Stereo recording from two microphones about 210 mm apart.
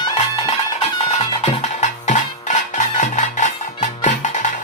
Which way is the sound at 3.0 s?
35° left (ahead or behind).